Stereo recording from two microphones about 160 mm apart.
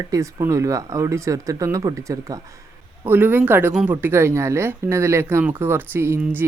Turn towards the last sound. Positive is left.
turn(degrees=-10)  # may be behind; listen again after turning